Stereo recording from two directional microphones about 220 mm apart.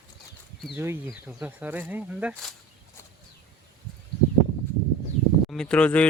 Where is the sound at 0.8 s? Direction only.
10° right (ahead or behind).